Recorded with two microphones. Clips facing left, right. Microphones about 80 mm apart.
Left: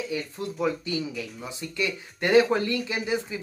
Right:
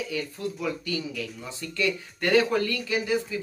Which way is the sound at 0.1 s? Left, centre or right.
Left.